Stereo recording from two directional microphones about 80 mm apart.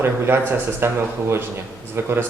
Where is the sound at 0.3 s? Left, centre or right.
Right.